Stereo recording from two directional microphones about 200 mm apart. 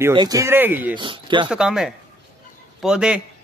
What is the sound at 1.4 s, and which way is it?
Speech, 5° right (ahead or behind).